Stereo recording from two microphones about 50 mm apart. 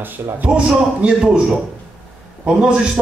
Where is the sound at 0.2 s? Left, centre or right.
Right.